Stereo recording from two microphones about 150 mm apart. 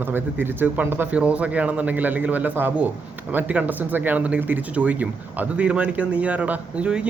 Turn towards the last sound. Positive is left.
turn(degrees=-5)  # may be behind; listen again after turning